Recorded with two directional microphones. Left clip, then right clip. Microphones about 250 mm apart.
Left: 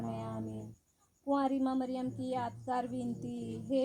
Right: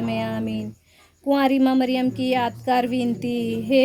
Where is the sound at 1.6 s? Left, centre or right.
Right.